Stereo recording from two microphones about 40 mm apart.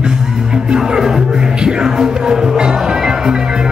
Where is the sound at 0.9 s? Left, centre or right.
Centre.